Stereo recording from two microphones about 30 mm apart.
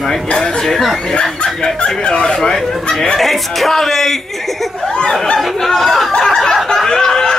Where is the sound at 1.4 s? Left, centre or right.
Centre.